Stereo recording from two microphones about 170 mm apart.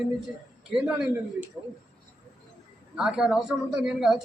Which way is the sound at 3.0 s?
5° right (ahead or behind).